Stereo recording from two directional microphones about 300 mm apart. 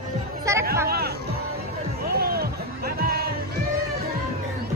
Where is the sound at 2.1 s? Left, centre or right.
Right.